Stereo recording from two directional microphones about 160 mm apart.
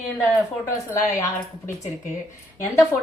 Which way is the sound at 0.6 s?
15° left (ahead or behind).